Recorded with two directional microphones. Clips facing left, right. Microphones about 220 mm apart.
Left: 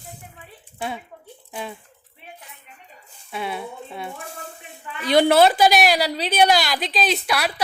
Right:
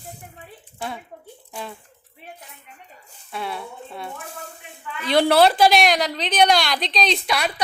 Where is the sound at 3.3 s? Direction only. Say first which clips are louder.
Left 2 dB; centre (ahead or behind).